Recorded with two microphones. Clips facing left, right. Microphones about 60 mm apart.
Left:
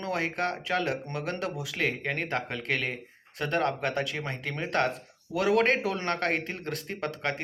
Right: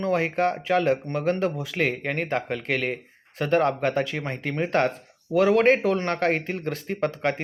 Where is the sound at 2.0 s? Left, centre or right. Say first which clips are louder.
Right 4 dB; right.